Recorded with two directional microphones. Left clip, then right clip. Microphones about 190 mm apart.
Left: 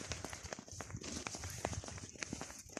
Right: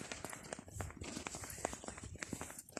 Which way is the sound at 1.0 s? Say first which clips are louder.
Left 3 dB; 30° left (ahead or behind).